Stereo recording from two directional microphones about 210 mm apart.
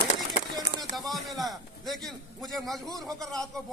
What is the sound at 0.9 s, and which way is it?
A man's voice, centre (ahead or behind).